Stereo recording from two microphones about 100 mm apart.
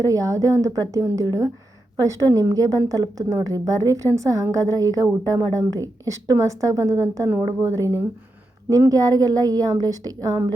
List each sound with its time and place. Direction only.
0.0 s a woman's voice: 35° right (ahead or behind)